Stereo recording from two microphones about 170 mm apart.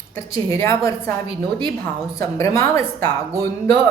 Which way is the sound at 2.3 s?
15° left (ahead or behind).